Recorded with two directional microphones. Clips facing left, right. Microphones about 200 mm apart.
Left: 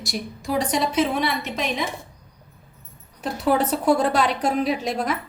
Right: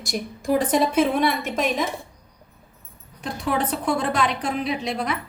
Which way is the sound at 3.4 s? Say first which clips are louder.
Left 4 dB; 40° left (ahead or behind).